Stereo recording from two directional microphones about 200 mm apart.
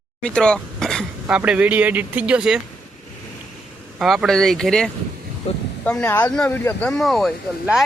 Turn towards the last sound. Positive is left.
turn(degrees=0)  # may be behind; listen again after turning